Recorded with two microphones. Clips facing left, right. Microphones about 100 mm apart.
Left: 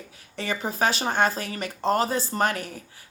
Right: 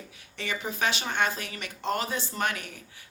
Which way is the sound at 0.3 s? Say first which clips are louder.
Left 5 dB; 40° left (ahead or behind).